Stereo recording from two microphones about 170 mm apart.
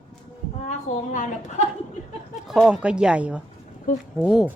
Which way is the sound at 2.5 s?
Centre (ahead or behind).